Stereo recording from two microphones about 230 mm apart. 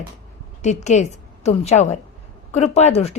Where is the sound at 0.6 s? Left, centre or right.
Left.